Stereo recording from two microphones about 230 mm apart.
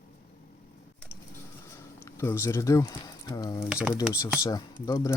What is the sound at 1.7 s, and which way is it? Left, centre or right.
Speech, centre.